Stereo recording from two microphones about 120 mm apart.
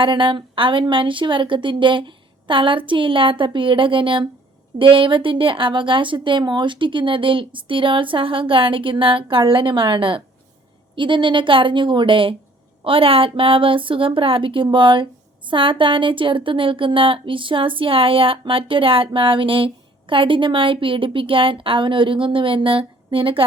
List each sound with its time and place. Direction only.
0.0 s speech: 45° right (ahead or behind)